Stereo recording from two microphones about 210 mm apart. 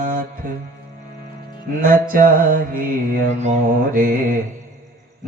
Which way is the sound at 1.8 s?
40° right (ahead or behind).